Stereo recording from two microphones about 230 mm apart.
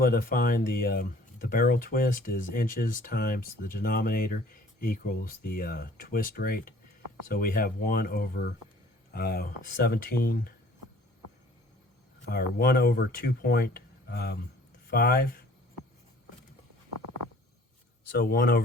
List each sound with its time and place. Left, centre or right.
0.0 s speech: left
12.3 s speech: left
18.2 s speech: left